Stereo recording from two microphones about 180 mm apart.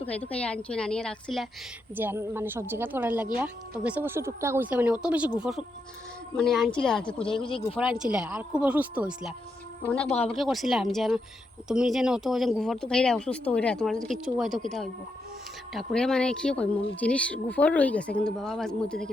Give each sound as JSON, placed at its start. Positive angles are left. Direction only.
{"t": 0.1, "sound": "speech", "side_deg": 10}
{"t": 2.0, "sound": "speech", "side_deg": -10}
{"t": 7.3, "sound": "speech", "side_deg": 30}
{"t": 7.8, "sound": "speech", "side_deg": -5}
{"t": 10.0, "sound": "speech", "side_deg": 35}
{"t": 10.2, "sound": "speech", "side_deg": 0}